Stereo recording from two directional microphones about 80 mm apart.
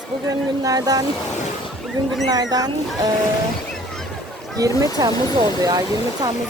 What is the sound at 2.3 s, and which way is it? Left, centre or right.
Speech, right.